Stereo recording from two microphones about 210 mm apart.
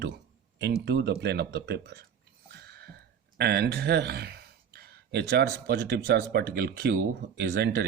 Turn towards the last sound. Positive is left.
turn(degrees=-50)  # may be behind; listen again after turning